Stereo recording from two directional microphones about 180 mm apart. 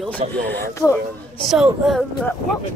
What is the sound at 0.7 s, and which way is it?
Speech, 15° left (ahead or behind).